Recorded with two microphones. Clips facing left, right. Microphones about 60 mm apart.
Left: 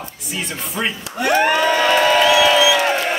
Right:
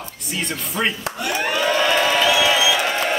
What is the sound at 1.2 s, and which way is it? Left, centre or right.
Speech, left.